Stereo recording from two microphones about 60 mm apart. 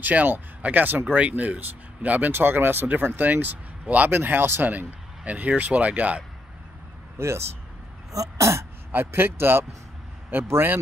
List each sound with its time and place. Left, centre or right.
0.0 s speech: right
7.2 s speech: right
8.1 s throat clearing: right
8.9 s speech: right